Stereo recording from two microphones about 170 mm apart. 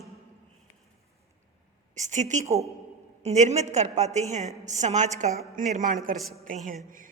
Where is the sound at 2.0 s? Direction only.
45° right (ahead or behind).